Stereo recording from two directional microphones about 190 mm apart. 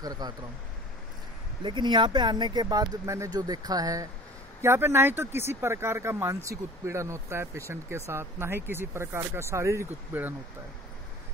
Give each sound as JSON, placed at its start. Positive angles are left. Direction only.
{"t": 0.0, "sound": "speech", "side_deg": -20}
{"t": 1.6, "sound": "speech", "side_deg": -25}